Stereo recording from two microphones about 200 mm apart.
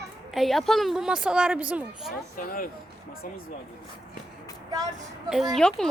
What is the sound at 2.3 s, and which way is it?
Speech, 45° left (ahead or behind).